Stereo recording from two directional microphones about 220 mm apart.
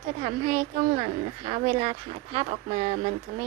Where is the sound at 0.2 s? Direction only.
30° right (ahead or behind).